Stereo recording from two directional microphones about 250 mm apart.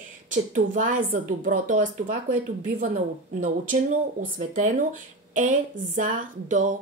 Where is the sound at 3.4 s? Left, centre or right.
Right.